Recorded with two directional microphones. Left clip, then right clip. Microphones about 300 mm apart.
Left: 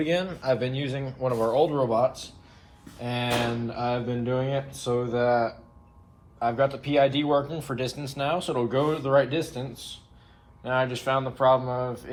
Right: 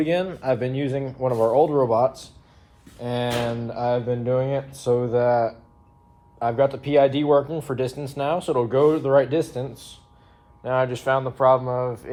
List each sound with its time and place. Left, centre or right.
0.0 s speech: right